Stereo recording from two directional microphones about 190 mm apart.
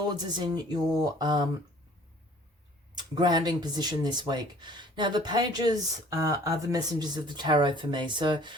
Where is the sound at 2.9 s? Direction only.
20° right (ahead or behind).